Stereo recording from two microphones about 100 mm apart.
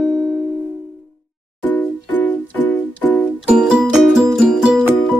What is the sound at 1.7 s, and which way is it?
Music, 15° left (ahead or behind).